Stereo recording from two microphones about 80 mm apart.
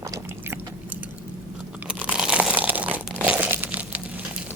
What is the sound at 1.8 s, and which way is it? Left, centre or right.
Crumpling, centre.